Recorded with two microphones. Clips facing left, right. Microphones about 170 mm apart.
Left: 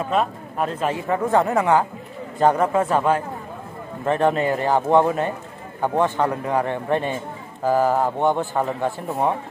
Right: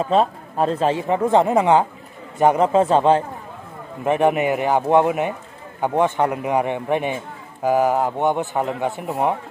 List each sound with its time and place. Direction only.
0.1 s speech: 30° right (ahead or behind); by 9.3 s 15° right (ahead or behind)